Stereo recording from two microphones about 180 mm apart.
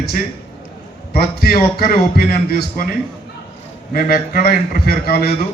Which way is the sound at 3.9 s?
55° left (ahead or behind).